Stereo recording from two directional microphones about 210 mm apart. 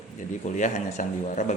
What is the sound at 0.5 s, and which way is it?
Speech, 35° left (ahead or behind).